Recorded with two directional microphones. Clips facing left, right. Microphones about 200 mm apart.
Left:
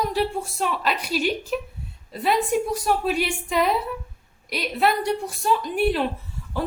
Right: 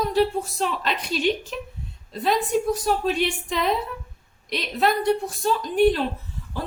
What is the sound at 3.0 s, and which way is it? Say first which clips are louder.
A woman's voice: right 1 dB; 5° left (ahead or behind).